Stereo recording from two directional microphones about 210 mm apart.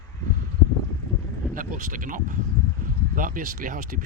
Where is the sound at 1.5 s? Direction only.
40° right (ahead or behind).